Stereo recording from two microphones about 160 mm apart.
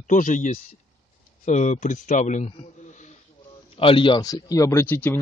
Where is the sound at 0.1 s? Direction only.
50° left (ahead or behind).